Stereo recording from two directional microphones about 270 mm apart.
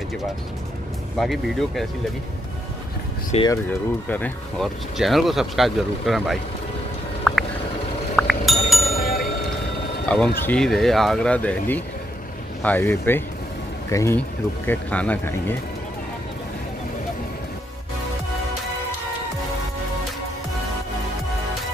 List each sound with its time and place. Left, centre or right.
1.1 s speech: centre
3.3 s speech: centre
3.6 s speech: centre
7.3 s a sound: centre
8.2 s chink: centre
8.9 s a sound: left
10.0 s speech: centre